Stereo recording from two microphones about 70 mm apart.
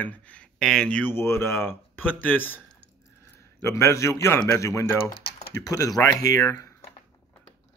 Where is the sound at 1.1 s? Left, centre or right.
Left.